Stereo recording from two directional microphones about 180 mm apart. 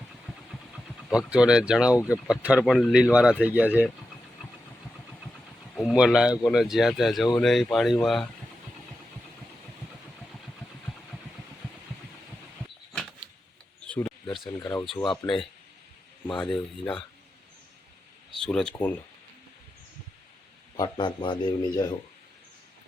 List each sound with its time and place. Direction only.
1.1 s speech: 5° right (ahead or behind)
5.7 s speech: centre (ahead or behind)
13.8 s a sound: 10° left (ahead or behind)
14.6 s speech: 20° left (ahead or behind)
14.8 s speech: centre (ahead or behind)
18.4 s speech: 5° left (ahead or behind)
20.7 s speech: 25° left (ahead or behind)